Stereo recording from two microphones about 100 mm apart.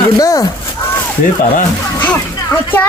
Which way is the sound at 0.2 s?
40° left (ahead or behind).